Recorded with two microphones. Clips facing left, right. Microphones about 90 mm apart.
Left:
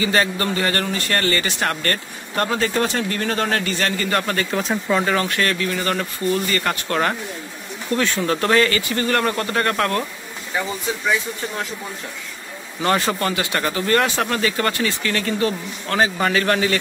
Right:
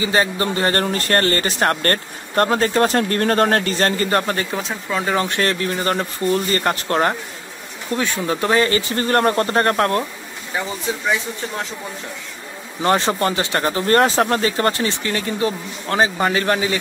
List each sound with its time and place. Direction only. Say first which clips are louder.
0.0 s a man's voice: right 1 dB; 25° right (ahead or behind)
4.6 s speech: left 4 dB; 5° left (ahead or behind)
5.0 s a man's voice: right 1 dB; 20° right (ahead or behind)
7.9 s speech: left 1 dB; 15° right (ahead or behind)
8.6 s a man's voice: right 1 dB; 30° right (ahead or behind)
12.8 s speech: right 2 dB; 25° right (ahead or behind)